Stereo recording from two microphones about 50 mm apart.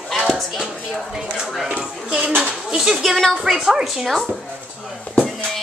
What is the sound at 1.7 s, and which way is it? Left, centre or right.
Speech, right.